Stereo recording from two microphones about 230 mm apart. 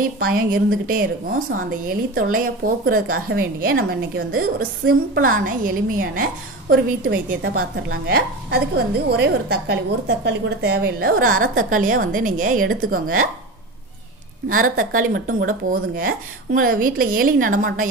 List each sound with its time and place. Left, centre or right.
0.2 s speech: right
14.5 s speech: right